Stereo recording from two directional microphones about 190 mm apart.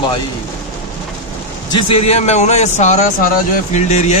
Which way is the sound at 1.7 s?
30° left (ahead or behind).